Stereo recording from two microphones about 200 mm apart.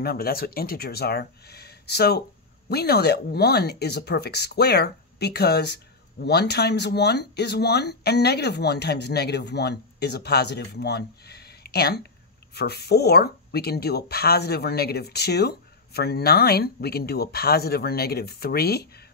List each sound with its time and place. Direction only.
0.0 s speech: 50° left (ahead or behind)